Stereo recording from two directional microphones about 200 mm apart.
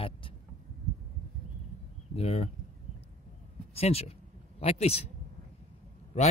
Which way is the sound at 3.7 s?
30° left (ahead or behind).